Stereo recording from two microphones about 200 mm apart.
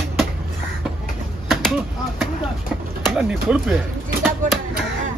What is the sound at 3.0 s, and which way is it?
Speech, 5° right (ahead or behind).